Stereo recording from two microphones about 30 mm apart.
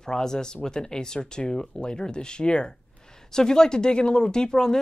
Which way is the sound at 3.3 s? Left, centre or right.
Left.